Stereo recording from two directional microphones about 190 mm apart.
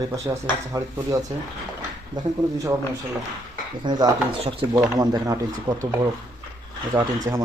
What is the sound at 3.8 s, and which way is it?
Speech, 20° right (ahead or behind).